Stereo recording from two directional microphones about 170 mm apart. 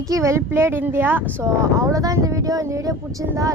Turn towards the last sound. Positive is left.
turn(degrees=-20)  # may be behind; listen again after turning